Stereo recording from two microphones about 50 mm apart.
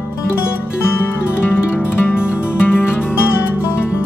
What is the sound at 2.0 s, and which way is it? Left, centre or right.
Music, left.